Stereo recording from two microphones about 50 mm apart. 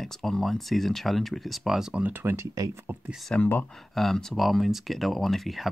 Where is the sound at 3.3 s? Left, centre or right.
Left.